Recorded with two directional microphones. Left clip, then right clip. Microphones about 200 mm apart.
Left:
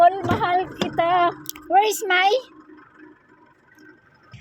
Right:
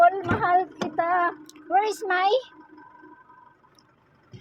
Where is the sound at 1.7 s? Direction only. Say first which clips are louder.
Left 5 dB; 5° left (ahead or behind).